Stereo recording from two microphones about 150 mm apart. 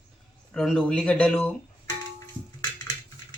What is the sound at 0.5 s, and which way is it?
Speech, 5° left (ahead or behind).